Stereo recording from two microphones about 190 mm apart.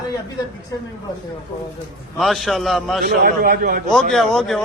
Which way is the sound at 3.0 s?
50° right (ahead or behind).